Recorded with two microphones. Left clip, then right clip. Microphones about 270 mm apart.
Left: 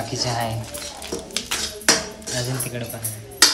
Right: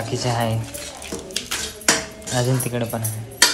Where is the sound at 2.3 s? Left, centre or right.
Centre.